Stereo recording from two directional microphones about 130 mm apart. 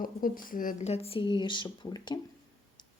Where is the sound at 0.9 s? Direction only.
50° left (ahead or behind).